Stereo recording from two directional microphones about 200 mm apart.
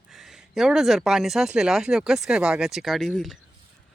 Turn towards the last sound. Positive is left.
turn(degrees=0)  # may be behind; listen again after turning